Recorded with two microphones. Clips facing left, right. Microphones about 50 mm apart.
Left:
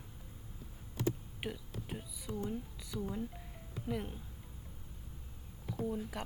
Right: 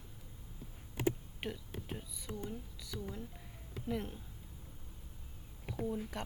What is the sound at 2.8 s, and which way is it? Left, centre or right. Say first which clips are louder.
A woman's voice: left 4 dB; centre.